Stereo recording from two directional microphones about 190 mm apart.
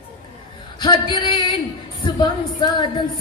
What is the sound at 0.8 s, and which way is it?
Speech, 25° left (ahead or behind).